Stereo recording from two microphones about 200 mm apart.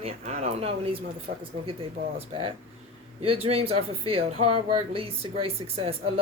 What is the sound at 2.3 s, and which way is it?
Speech, 25° right (ahead or behind).